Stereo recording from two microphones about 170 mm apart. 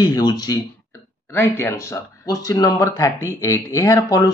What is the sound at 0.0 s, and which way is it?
Speech, 25° left (ahead or behind).